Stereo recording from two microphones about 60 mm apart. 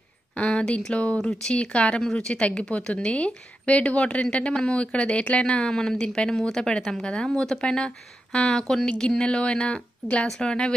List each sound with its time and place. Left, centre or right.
0.4 s a woman's voice: centre